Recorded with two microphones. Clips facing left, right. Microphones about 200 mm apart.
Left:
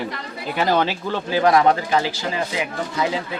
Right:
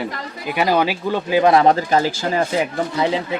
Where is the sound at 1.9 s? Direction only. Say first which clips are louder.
Right 4 dB; 45° right (ahead or behind).